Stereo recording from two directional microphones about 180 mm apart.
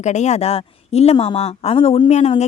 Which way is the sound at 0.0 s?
40° left (ahead or behind).